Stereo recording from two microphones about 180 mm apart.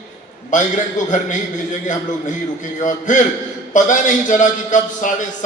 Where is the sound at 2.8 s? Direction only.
45° left (ahead or behind).